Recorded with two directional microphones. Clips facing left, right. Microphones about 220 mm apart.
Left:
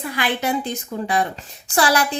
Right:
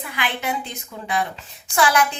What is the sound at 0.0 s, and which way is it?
A woman's voice, 40° left (ahead or behind).